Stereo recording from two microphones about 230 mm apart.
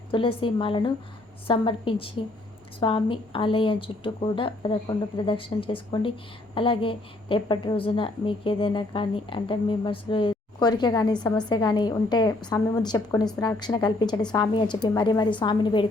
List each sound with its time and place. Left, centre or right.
0.1 s a woman's voice: left